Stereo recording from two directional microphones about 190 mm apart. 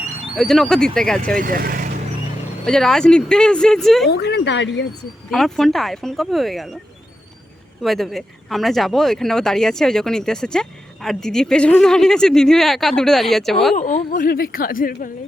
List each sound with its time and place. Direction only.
0.3 s speech: 5° left (ahead or behind)
1.4 s speech: 50° right (ahead or behind)
2.6 s speech: 5° left (ahead or behind)
4.1 s speech: 60° left (ahead or behind)
5.3 s speech: centre (ahead or behind)
7.8 s speech: centre (ahead or behind)
13.7 s speech: 40° left (ahead or behind)